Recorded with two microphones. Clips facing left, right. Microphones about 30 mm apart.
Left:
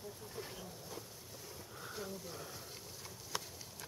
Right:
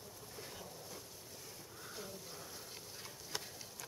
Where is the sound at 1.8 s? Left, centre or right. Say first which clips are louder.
Left 4 dB; centre.